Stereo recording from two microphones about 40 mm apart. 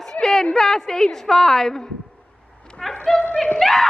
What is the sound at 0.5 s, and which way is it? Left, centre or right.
A woman's voice, centre.